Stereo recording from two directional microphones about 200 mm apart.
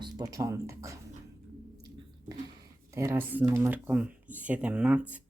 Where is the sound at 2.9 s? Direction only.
10° right (ahead or behind).